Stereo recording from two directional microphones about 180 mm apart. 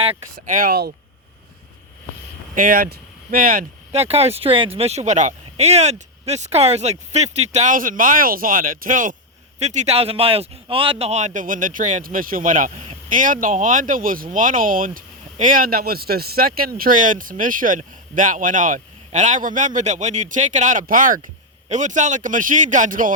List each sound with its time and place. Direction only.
0.3 s speech: 50° right (ahead or behind)
2.6 s speech: 50° right (ahead or behind)
3.9 s speech: 35° right (ahead or behind)